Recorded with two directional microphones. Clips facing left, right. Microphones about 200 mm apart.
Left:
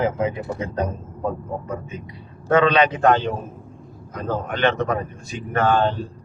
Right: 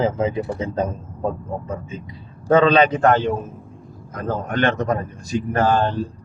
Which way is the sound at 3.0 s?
50° right (ahead or behind).